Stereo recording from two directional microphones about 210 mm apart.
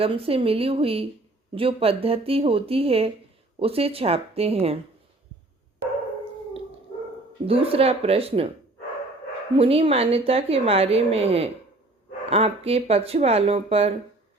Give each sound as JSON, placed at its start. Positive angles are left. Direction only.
{"t": 0.0, "sound": "speech", "side_deg": -25}
{"t": 7.4, "sound": "speech", "side_deg": -25}
{"t": 9.6, "sound": "speech", "side_deg": -25}